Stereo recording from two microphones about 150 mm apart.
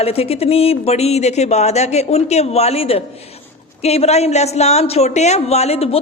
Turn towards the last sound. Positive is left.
turn(degrees=45)  # may be behind; listen again after turning